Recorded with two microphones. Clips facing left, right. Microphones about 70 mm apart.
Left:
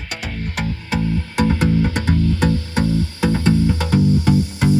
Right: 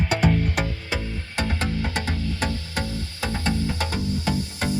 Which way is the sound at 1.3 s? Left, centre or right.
Centre.